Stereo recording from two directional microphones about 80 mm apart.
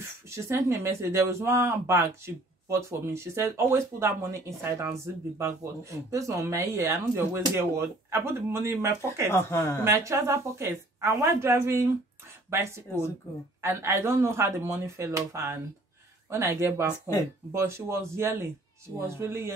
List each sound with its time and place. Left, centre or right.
0.3 s speech: right
9.3 s a woman's voice: left
9.8 s speech: right